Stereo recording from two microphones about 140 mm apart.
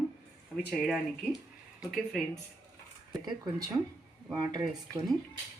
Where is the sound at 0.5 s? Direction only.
5° left (ahead or behind).